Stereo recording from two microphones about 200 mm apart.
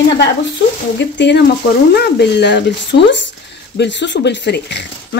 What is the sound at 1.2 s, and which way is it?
Speech, 60° left (ahead or behind).